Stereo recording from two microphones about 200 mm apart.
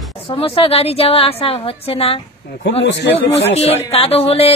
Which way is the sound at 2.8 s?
65° left (ahead or behind).